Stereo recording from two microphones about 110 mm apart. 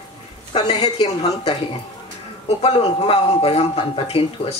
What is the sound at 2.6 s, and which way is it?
Speech, 65° left (ahead or behind).